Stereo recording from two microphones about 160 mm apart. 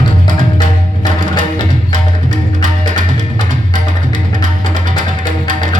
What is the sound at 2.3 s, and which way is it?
Music, 50° right (ahead or behind).